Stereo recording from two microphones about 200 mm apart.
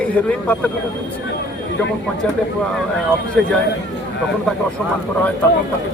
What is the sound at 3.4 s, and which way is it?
Speech, 5° left (ahead or behind).